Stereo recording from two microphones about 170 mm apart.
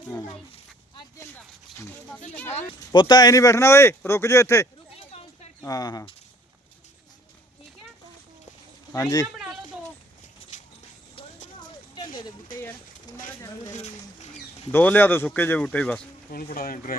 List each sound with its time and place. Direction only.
2.3 s speech: 10° left (ahead or behind)
2.9 s speech: 25° left (ahead or behind)
8.9 s speech: 20° left (ahead or behind)
11.1 s clip-clop: 30° left (ahead or behind)
11.9 s a sound: 25° left (ahead or behind)
12.6 s a sound: 15° left (ahead or behind)
13.7 s a sound: 40° left (ahead or behind)
14.7 s speech: 10° left (ahead or behind)
16.3 s speech: 60° left (ahead or behind)